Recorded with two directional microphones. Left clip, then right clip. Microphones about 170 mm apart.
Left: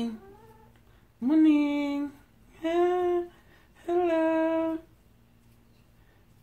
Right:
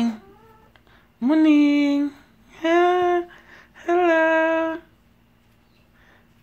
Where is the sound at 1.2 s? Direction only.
35° right (ahead or behind).